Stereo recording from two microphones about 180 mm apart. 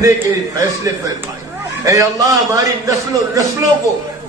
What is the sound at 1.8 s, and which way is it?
A man's voice, 20° right (ahead or behind).